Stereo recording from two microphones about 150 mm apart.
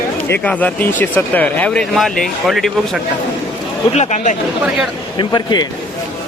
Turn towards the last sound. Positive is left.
turn(degrees=30)  # may be behind; listen again after turning